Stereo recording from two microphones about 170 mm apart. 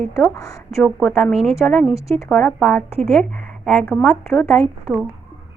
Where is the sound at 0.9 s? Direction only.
5° right (ahead or behind).